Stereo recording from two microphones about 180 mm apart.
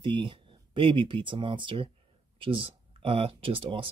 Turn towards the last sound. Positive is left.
turn(degrees=-30)  # may be behind; listen again after turning